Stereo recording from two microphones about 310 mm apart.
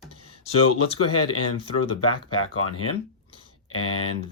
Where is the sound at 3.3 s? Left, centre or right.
Left.